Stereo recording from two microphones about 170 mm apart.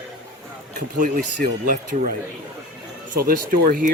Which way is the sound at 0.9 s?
55° right (ahead or behind).